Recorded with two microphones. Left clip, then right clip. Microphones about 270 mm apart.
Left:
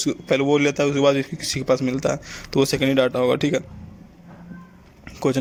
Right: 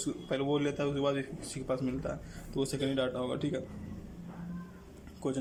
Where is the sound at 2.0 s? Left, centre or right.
Left.